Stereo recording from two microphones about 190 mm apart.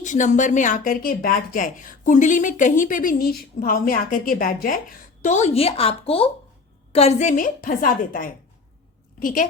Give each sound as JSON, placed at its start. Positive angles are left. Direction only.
{"t": 0.0, "sound": "speech", "side_deg": 40}